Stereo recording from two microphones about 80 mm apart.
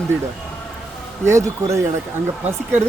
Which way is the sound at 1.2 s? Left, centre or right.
Right.